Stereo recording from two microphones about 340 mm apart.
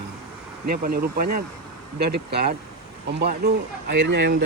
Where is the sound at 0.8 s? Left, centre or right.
Right.